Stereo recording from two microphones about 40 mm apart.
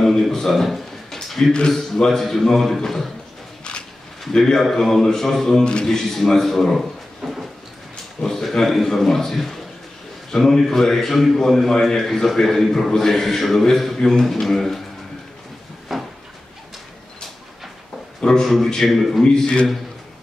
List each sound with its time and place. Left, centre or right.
0.0 s a sound: centre
1.7 s a man's voice: centre
4.3 s a man's voice: centre
5.6 s a man's voice: left
5.9 s a man's voice: centre
7.9 s a man's voice: centre
15.9 s cupboard open or close: centre
18.2 s a man's voice: centre
18.9 s a man's voice: centre
19.2 s a man's voice: left